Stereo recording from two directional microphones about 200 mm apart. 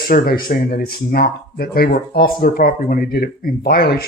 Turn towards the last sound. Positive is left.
turn(degrees=50)  # may be behind; listen again after turning